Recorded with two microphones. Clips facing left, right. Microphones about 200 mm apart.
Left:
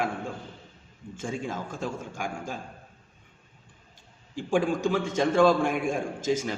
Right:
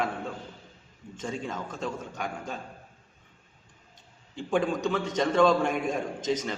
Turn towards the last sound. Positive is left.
turn(degrees=10)  # may be behind; listen again after turning